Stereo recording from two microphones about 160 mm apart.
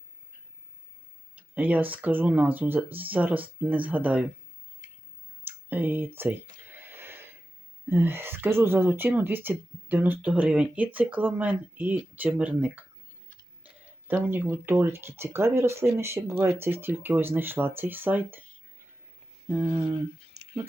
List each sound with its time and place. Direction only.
1.4 s speech: 10° right (ahead or behind)
5.5 s a sound: 10° right (ahead or behind)
7.9 s speech: 15° right (ahead or behind)
14.1 s speech: 10° right (ahead or behind)
19.5 s speech: 15° right (ahead or behind)
20.4 s a sound: 40° right (ahead or behind)